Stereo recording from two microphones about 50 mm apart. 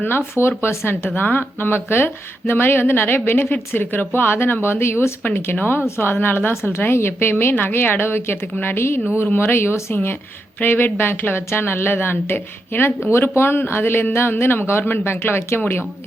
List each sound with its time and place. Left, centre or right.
0.0 s speech: left
1.0 s speech: left
5.5 s speech: left